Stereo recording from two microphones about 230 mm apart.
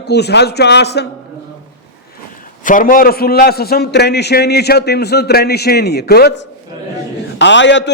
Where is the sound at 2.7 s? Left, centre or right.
Left.